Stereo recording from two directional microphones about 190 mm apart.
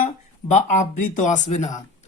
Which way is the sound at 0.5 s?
40° left (ahead or behind).